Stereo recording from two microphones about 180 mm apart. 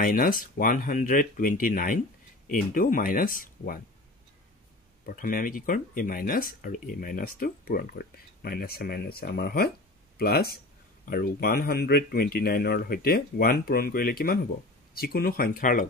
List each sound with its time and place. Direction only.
0.0 s speech: 50° left (ahead or behind)
5.0 s speech: 50° left (ahead or behind)